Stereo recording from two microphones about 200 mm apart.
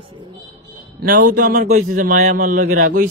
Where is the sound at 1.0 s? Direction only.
45° right (ahead or behind).